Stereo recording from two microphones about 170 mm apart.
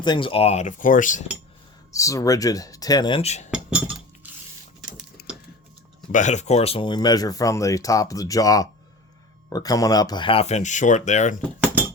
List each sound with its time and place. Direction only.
0.0 s speech: 30° left (ahead or behind); by 1.2 s 50° left (ahead or behind)
1.9 s speech: 20° left (ahead or behind); by 3.5 s 40° left (ahead or behind)
3.5 s chink: 5° right (ahead or behind)
6.1 s speech: 45° left (ahead or behind)